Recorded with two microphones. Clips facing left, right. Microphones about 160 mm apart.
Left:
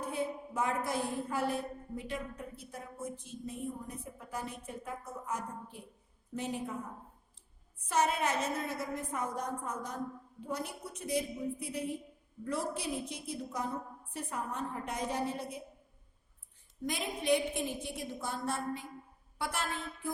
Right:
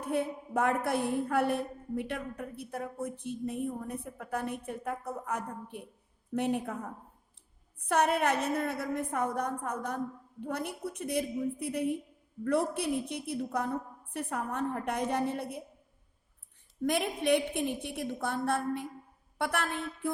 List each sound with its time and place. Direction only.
0.0 s a woman's voice: 60° right (ahead or behind)
16.8 s a woman's voice: 60° right (ahead or behind)